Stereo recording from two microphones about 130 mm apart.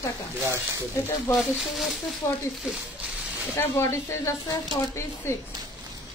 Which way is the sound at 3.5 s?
20° left (ahead or behind).